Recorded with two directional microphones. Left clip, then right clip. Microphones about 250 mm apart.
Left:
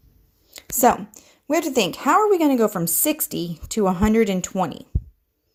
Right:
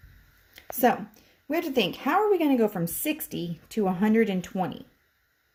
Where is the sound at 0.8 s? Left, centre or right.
Left.